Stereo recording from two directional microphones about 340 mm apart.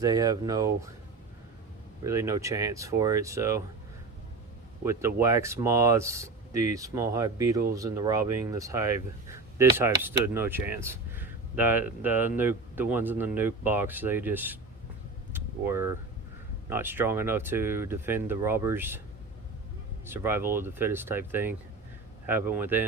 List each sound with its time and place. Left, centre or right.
0.0 s speech: centre
2.0 s speech: centre
4.9 s speech: centre
15.3 s vehicle: centre
16.6 s speech: centre
20.1 s speech: centre